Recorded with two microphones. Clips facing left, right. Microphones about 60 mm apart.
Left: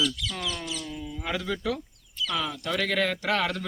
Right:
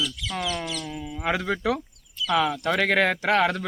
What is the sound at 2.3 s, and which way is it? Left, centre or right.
Speech, right.